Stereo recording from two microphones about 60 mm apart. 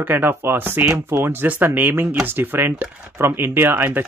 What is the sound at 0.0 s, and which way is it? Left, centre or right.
Speech, right.